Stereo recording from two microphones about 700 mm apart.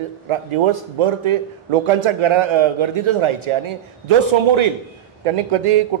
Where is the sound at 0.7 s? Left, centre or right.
Right.